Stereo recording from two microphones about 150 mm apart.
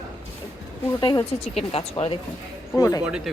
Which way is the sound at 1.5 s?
45° left (ahead or behind).